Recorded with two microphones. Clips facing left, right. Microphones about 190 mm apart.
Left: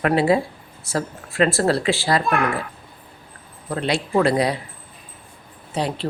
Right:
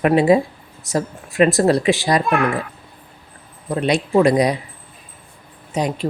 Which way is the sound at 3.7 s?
20° right (ahead or behind).